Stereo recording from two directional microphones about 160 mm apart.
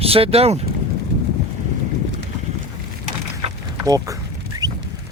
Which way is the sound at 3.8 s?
20° right (ahead or behind).